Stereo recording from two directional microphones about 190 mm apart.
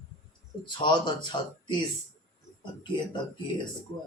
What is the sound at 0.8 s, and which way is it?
Speech, 25° left (ahead or behind).